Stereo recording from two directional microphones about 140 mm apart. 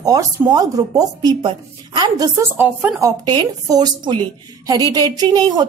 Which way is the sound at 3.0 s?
30° right (ahead or behind).